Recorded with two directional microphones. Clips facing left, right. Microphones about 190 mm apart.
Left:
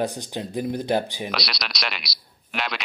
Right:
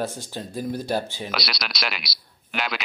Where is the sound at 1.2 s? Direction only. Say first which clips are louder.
Even; centre (ahead or behind).